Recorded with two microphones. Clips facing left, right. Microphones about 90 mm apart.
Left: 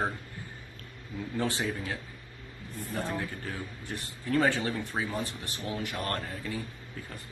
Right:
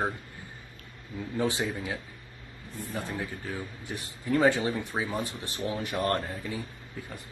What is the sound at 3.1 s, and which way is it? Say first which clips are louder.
Speech: right 1 dB; 5° right (ahead or behind).